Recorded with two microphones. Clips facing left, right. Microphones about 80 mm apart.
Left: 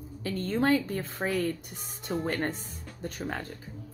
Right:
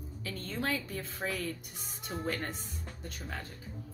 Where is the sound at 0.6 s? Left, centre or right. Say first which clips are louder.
Left 9 dB; left.